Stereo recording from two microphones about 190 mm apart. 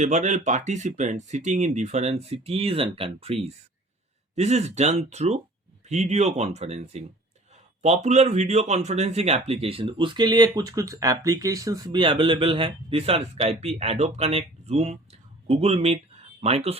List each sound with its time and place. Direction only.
0.0 s speech: 40° right (ahead or behind)